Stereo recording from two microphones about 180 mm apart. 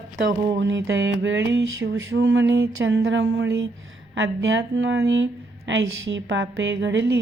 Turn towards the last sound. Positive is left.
turn(degrees=-80)